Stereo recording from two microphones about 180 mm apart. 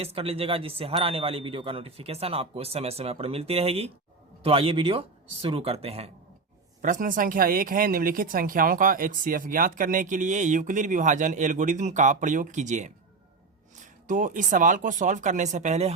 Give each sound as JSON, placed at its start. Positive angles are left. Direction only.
{"t": 0.0, "sound": "speech", "side_deg": -35}
{"t": 6.8, "sound": "speech", "side_deg": -45}
{"t": 14.1, "sound": "speech", "side_deg": -45}